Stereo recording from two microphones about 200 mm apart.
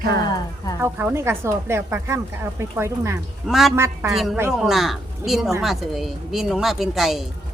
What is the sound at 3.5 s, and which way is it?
Speech, centre (ahead or behind).